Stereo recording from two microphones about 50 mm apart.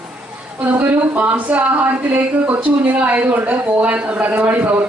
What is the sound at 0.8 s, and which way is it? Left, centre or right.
Speech, right.